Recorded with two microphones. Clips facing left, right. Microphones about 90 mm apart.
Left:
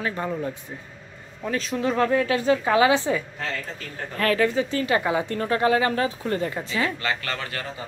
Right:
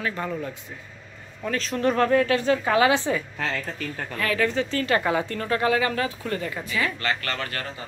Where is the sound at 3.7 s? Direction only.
40° left (ahead or behind).